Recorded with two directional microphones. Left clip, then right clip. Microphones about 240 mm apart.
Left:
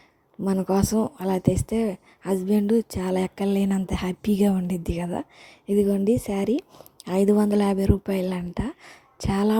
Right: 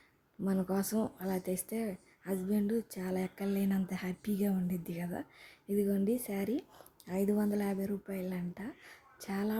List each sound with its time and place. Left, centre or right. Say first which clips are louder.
0.4 s speech: left 11 dB; left